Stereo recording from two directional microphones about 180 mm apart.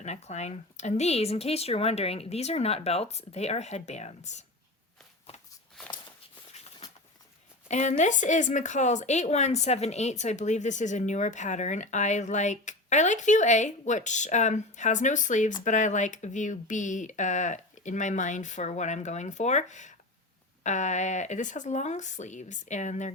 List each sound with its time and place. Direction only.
0.0 s speech: 40° left (ahead or behind)
7.7 s speech: 40° left (ahead or behind)